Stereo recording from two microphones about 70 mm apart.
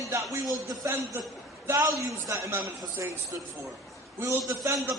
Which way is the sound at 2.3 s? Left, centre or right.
Right.